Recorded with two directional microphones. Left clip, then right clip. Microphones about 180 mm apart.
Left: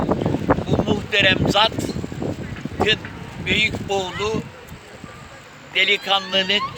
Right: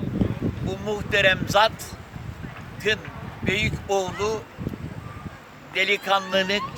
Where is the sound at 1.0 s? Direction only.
10° right (ahead or behind).